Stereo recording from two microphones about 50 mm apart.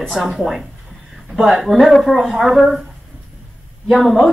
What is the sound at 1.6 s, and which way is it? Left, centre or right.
Speech, centre.